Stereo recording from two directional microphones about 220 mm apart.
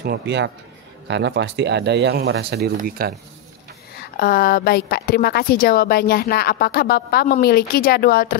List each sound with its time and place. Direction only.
0.0 s speech: 50° right (ahead or behind)
4.2 s a woman's voice: 40° left (ahead or behind)